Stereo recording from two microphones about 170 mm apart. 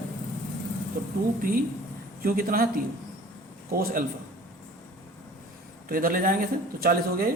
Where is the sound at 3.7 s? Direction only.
60° right (ahead or behind).